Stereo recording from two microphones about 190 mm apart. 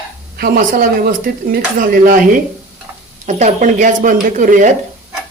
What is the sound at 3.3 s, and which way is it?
Speech, 40° right (ahead or behind).